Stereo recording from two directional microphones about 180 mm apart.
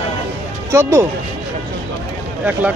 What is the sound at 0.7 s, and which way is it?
Speech, 15° right (ahead or behind).